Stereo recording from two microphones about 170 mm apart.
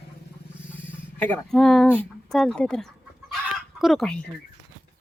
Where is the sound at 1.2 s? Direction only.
10° left (ahead or behind).